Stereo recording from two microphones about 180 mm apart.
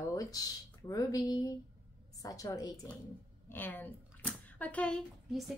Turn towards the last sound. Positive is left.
turn(degrees=0)  # may be behind; listen again after turning